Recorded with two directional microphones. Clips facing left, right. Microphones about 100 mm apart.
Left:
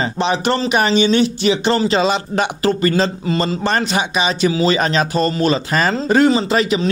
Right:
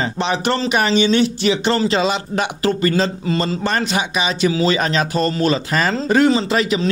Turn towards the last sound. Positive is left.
turn(degrees=25)  # may be behind; listen again after turning